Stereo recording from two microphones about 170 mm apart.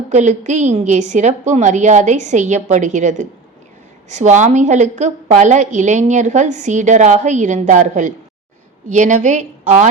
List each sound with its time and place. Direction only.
0.1 s a woman's voice: 45° right (ahead or behind)